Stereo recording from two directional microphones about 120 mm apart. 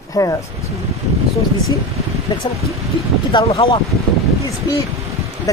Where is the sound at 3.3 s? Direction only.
40° left (ahead or behind).